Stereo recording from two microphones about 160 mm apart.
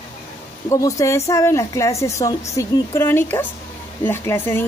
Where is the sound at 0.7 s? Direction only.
20° left (ahead or behind).